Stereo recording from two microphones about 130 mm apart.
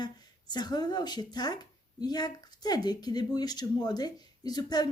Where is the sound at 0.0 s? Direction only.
30° left (ahead or behind).